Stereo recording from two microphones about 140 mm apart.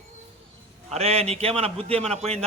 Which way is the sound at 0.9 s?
50° right (ahead or behind).